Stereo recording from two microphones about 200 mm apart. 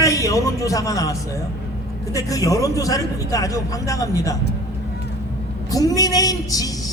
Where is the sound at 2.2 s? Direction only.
15° left (ahead or behind).